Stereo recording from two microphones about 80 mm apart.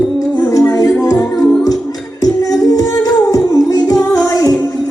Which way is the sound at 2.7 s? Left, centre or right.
Left.